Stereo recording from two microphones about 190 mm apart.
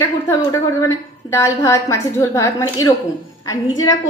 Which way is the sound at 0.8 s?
15° left (ahead or behind).